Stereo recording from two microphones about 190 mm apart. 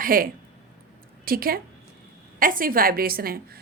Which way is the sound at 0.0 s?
50° right (ahead or behind).